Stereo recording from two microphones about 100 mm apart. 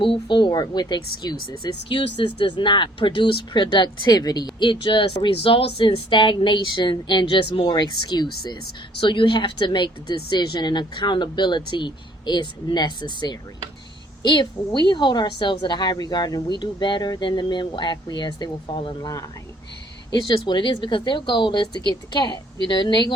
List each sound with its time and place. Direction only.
0.0 s speech: 55° left (ahead or behind)
20.2 s speech: 55° left (ahead or behind)